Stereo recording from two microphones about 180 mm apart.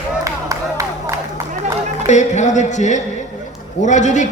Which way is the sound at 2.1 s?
40° left (ahead or behind).